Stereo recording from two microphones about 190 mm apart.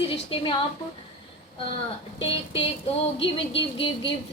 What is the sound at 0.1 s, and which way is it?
Speech, 25° left (ahead or behind).